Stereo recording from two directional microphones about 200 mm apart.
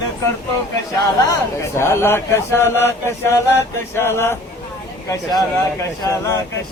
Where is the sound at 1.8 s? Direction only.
10° left (ahead or behind).